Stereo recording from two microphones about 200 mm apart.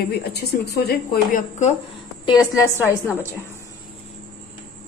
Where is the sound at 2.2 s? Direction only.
15° left (ahead or behind).